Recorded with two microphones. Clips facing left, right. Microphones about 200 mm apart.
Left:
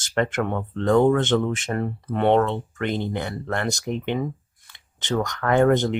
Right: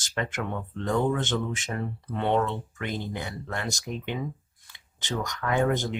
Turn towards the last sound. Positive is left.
turn(degrees=65)  # may be behind; listen again after turning